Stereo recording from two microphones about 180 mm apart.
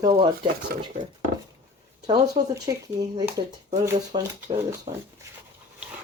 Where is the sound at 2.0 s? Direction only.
25° right (ahead or behind).